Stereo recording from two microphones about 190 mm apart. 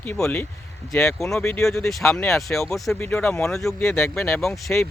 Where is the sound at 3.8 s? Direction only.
10° left (ahead or behind).